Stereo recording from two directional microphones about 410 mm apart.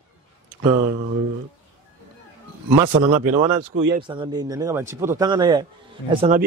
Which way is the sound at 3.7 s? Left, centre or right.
Right.